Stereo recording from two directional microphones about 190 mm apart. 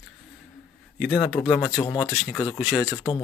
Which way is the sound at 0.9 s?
Centre (ahead or behind).